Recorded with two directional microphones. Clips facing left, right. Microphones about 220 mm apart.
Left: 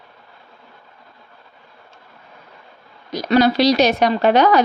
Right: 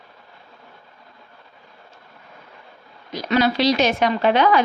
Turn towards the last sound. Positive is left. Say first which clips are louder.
# left 3 dB
turn(degrees=40)  # may be behind; listen again after turning